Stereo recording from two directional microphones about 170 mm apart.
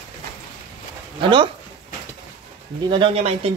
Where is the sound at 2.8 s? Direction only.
30° right (ahead or behind).